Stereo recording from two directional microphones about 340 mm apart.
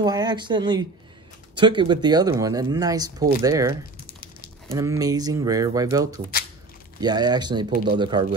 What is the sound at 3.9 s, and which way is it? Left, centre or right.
Crumpling, left.